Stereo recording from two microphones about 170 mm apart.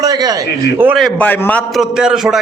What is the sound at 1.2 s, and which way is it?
Speech, 10° left (ahead or behind).